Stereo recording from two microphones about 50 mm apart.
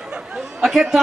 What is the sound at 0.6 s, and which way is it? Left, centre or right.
Speech, centre.